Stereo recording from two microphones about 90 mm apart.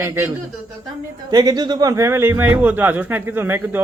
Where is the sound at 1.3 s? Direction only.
45° right (ahead or behind).